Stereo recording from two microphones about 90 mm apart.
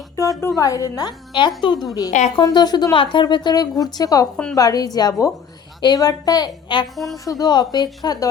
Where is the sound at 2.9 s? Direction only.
70° left (ahead or behind); by 6.8 s 50° left (ahead or behind).